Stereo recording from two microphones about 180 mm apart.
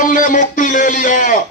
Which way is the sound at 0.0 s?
45° left (ahead or behind).